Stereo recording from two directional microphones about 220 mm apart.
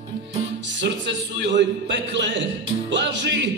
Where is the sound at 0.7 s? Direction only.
55° right (ahead or behind).